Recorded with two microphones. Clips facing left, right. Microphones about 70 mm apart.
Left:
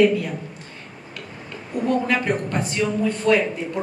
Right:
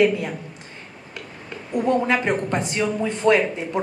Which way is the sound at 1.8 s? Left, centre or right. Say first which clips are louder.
Right 1 dB; right.